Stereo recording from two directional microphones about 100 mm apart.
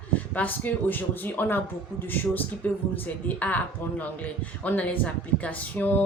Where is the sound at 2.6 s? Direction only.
15° left (ahead or behind).